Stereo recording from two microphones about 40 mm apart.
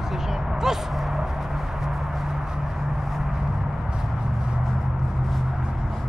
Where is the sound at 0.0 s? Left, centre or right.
Centre.